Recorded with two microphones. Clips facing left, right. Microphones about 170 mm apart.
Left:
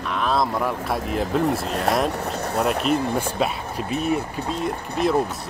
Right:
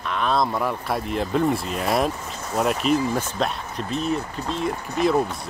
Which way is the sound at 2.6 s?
Centre (ahead or behind).